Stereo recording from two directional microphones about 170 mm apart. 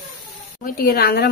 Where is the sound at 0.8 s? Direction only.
65° left (ahead or behind).